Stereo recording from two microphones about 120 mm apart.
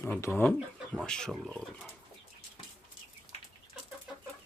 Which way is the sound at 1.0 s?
5° left (ahead or behind).